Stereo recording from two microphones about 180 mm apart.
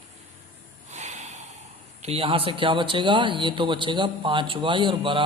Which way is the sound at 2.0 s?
35° right (ahead or behind).